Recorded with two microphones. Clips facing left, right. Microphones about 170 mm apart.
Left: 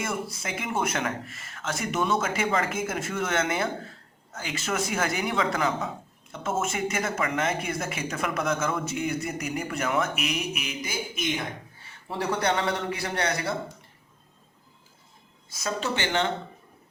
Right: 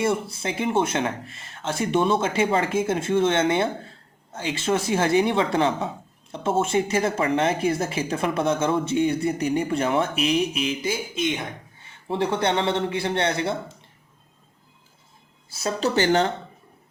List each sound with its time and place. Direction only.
0.0 s speech: 30° right (ahead or behind)
15.4 s speech: 30° right (ahead or behind)